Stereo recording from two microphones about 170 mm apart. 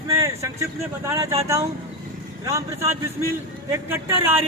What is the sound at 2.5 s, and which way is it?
Speech, 20° right (ahead or behind).